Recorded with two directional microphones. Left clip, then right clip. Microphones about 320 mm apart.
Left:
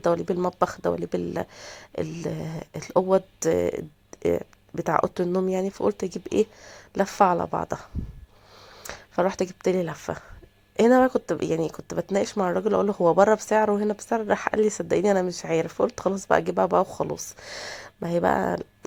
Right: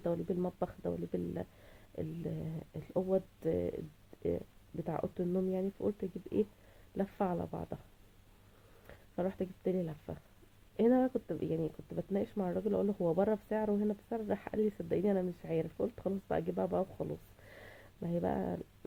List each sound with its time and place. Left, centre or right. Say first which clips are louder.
0.0 s speech: left 13 dB; centre
2.5 s speech: left 14 dB; centre
4.3 s speech: left 12 dB; left
4.9 s speech: left 14 dB; centre
8.9 s speech: left 14 dB; centre